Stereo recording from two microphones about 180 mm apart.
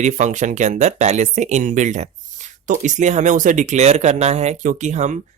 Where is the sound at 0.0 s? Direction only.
40° right (ahead or behind).